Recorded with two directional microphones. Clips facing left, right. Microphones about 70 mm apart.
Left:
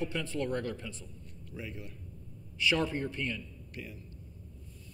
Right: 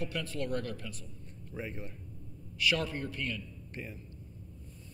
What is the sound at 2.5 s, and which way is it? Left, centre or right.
Speech, left.